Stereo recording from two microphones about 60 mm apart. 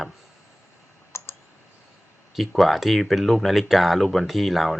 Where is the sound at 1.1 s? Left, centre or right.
Left.